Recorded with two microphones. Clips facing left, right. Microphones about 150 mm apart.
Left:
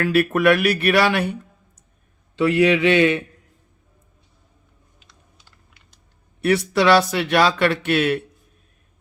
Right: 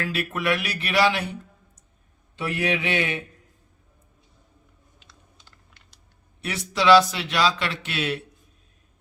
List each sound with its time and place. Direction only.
0.0 s a man's voice: 60° left (ahead or behind)
2.3 s a man's voice: 85° left
6.4 s a man's voice: 60° left (ahead or behind)